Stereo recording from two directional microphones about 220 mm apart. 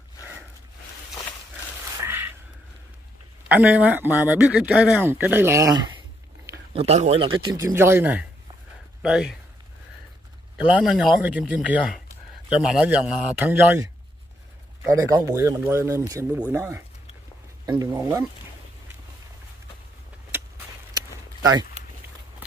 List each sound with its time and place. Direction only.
2.0 s a sound: 10° right (ahead or behind)
3.4 s speech: 5° right (ahead or behind)
6.7 s a man's voice: 25° right (ahead or behind); by 9.3 s 5° right (ahead or behind)
10.8 s a man's voice: 5° right (ahead or behind)
12.6 s a man's voice: 5° right (ahead or behind)
14.9 s speech: 15° right (ahead or behind)
20.3 s vehicle: 10° right (ahead or behind)
20.9 s a sound: 15° right (ahead or behind)